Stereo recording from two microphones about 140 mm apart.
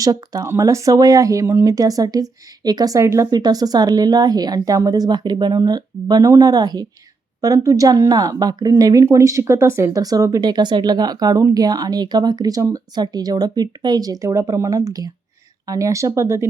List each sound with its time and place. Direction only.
0.0 s speech: 25° right (ahead or behind)